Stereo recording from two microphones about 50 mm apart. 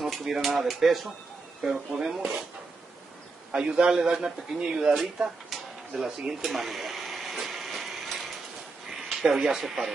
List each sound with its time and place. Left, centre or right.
0.0 s speech: centre
3.5 s speech: centre
5.5 s a sound: centre
8.9 s speech: centre